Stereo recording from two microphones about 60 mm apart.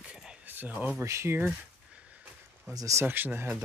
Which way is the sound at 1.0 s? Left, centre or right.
Right.